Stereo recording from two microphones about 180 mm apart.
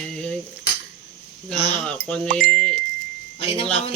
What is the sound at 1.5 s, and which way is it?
Speech, 35° left (ahead or behind).